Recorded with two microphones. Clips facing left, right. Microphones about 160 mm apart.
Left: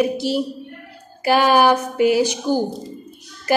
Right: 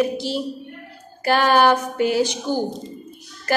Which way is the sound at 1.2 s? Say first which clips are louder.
Left 2 dB; 10° left (ahead or behind).